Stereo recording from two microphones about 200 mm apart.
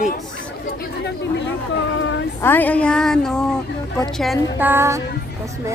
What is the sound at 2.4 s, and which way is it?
A woman's voice, 10° left (ahead or behind).